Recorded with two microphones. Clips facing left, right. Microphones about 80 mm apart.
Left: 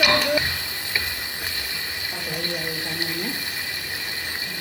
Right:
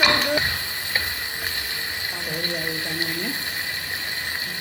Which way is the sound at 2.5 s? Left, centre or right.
Right.